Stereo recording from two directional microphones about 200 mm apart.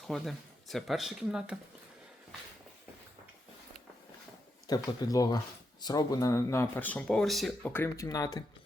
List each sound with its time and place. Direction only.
0.1 s speech: centre (ahead or behind)
4.6 s speech: 20° left (ahead or behind)